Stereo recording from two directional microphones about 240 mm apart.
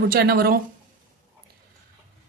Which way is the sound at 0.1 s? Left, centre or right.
Right.